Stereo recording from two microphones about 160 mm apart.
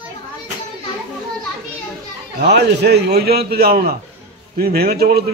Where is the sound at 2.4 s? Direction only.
90° right.